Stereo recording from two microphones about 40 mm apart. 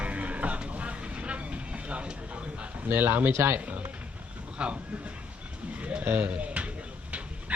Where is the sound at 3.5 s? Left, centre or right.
Right.